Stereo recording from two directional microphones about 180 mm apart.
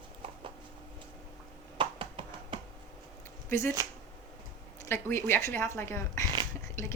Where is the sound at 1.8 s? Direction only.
30° right (ahead or behind).